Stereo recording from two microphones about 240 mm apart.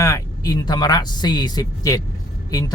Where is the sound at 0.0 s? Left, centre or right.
Centre.